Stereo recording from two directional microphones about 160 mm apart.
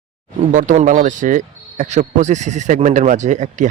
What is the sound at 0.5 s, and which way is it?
Speech, 50° right (ahead or behind).